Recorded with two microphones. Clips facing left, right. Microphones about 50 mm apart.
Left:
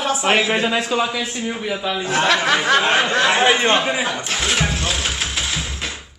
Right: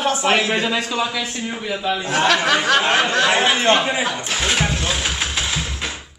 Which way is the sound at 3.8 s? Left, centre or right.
Centre.